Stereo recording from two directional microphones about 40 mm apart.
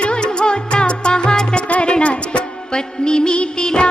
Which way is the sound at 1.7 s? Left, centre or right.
Left.